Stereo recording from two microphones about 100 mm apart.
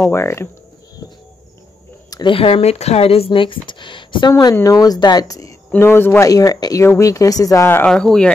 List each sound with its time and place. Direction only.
0.0 s speech: 25° left (ahead or behind)
2.2 s speech: 70° left (ahead or behind)
3.3 s speech: 55° left (ahead or behind)
4.3 s speech: 40° left (ahead or behind)
5.8 s speech: 25° left (ahead or behind)
6.2 s speech: 35° left (ahead or behind)
7.8 s speech: 5° left (ahead or behind)